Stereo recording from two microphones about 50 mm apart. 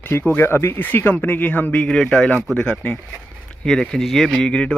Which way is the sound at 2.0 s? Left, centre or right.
Centre.